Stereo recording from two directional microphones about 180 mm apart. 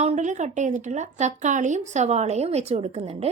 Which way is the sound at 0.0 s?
40° right (ahead or behind).